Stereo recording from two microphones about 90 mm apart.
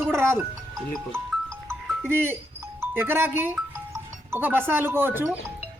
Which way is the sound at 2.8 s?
25° right (ahead or behind).